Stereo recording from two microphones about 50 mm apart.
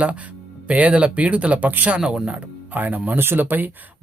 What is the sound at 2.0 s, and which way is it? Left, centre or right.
Speech, centre.